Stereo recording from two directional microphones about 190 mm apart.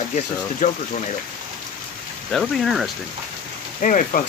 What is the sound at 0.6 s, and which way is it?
Speech, 45° left (ahead or behind).